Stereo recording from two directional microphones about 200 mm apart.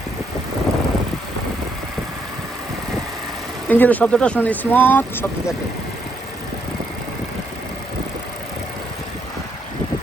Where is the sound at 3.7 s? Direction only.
10° left (ahead or behind).